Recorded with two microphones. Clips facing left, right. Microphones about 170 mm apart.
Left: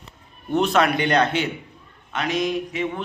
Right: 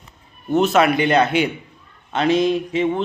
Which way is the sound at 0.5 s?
5° right (ahead or behind).